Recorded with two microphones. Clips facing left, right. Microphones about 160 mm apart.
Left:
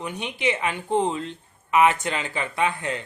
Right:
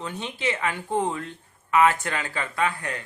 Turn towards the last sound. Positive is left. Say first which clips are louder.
# left 2 dB
turn(degrees=20)  # may be behind; listen again after turning